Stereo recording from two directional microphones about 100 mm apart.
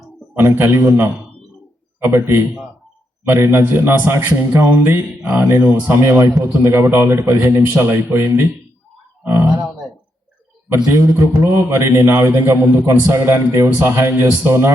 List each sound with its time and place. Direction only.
0.3 s a man's voice: 20° right (ahead or behind)
10.8 s a man's voice: 30° right (ahead or behind)